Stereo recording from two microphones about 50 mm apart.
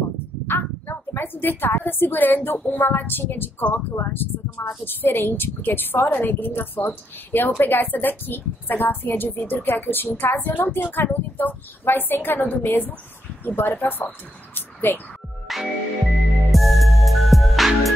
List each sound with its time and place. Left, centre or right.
0.5 s a woman's voice: left
15.4 s music: centre